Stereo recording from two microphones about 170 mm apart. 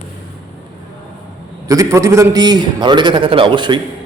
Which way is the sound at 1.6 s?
20° right (ahead or behind).